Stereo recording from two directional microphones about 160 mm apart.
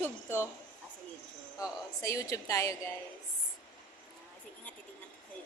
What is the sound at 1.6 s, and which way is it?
A woman's voice, 20° left (ahead or behind).